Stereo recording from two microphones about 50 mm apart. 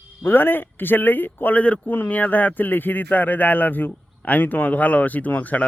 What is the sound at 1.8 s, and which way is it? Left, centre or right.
Speech, left.